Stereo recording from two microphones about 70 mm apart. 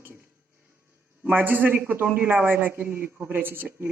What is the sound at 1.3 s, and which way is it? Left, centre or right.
A woman's voice, right.